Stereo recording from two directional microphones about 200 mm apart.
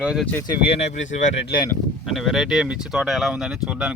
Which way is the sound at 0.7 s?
35° left (ahead or behind).